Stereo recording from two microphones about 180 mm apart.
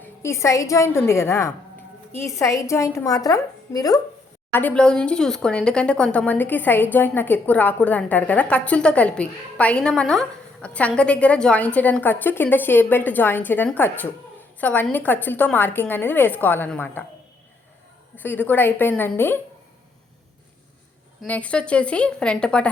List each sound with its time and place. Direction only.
0.0 s speech: 15° left (ahead or behind)
4.5 s speech: 10° left (ahead or behind)
18.2 s speech: 10° left (ahead or behind)
21.2 s a woman's voice: 5° left (ahead or behind)